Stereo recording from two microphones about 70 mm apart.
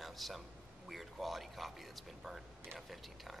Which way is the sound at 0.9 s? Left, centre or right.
Centre.